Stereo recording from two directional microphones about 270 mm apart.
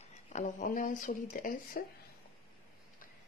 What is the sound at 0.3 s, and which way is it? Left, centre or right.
Speech, left.